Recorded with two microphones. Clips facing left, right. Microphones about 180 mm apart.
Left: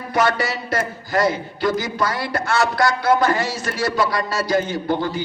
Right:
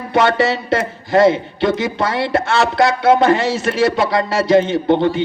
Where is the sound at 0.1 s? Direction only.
25° right (ahead or behind).